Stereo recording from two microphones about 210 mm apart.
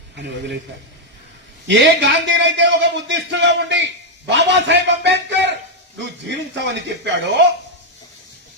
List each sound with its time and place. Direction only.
1.6 s a man's voice: 55° right (ahead or behind)